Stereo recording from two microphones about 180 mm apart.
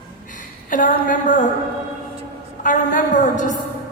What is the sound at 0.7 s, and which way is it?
Speech, 45° left (ahead or behind).